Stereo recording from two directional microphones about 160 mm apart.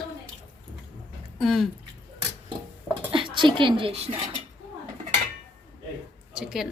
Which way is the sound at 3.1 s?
30° right (ahead or behind).